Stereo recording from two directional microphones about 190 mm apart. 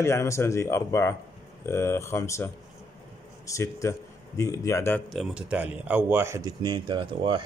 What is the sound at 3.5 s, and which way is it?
Speech, 15° left (ahead or behind).